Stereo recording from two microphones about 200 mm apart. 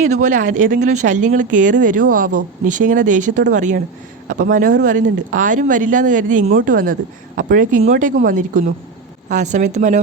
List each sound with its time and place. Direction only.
0.0 s speech: 35° right (ahead or behind)